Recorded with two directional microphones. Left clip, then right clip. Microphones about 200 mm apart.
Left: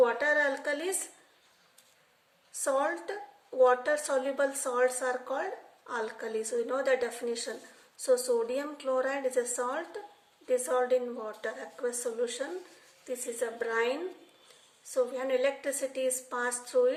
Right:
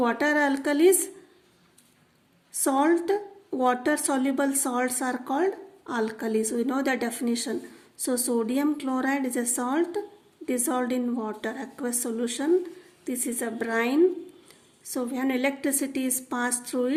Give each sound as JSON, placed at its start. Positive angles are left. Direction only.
{"t": 0.0, "sound": "speech", "side_deg": -50}
{"t": 2.6, "sound": "a woman's voice", "side_deg": -50}